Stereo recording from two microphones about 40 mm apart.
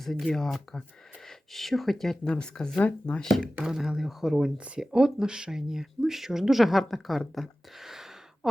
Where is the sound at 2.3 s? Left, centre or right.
Centre.